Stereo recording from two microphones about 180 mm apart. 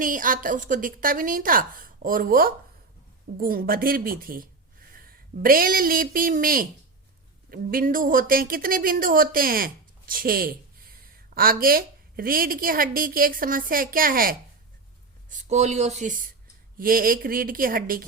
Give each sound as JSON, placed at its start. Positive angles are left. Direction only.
{"t": 0.0, "sound": "speech", "side_deg": -50}
{"t": 15.3, "sound": "speech", "side_deg": -40}